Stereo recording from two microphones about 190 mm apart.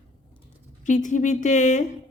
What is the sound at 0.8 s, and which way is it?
Speech, 40° left (ahead or behind).